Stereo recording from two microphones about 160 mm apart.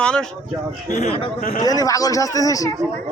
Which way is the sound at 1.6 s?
25° left (ahead or behind).